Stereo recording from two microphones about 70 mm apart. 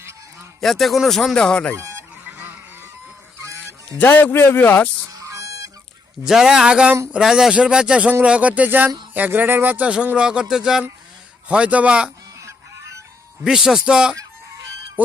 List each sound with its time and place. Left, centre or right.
0.6 s speech: centre
1.7 s fowl: right
2.2 s goose: right
3.9 s a man's voice: left
5.1 s goose: right
6.2 s speech: centre
11.4 s speech: centre
12.4 s music: right
13.4 s speech: centre; by 15.1 s right